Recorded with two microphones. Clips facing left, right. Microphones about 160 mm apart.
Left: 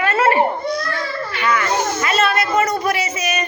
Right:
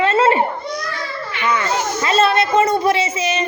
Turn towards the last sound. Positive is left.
turn(degrees=-25)  # may be behind; listen again after turning